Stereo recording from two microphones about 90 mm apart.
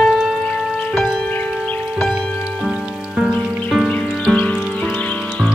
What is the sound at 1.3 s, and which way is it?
Tubular bells, 20° left (ahead or behind).